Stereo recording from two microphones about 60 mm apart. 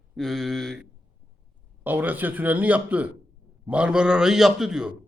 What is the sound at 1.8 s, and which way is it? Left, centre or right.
A man's voice, right.